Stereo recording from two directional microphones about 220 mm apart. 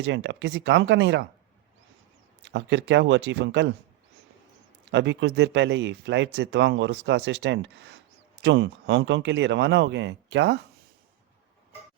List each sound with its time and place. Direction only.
0.0 s speech: 55° right (ahead or behind)
2.5 s speech: 55° right (ahead or behind)
4.9 s speech: 55° right (ahead or behind)